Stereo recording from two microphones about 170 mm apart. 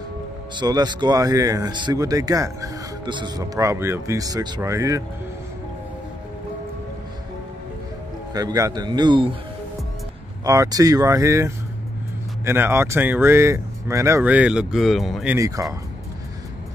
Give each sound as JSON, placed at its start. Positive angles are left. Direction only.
{"t": 0.6, "sound": "speech", "side_deg": -25}
{"t": 8.3, "sound": "speech", "side_deg": -20}
{"t": 10.4, "sound": "speech", "side_deg": -20}
{"t": 15.3, "sound": "speech", "side_deg": -20}